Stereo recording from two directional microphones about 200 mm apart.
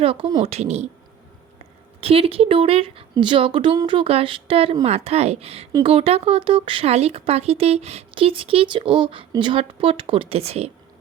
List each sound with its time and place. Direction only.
0.0 s speech: 25° right (ahead or behind)
2.0 s speech: 30° right (ahead or behind)